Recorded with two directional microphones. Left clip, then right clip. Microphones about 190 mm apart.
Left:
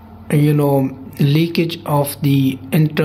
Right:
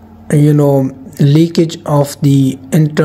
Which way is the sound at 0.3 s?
25° right (ahead or behind).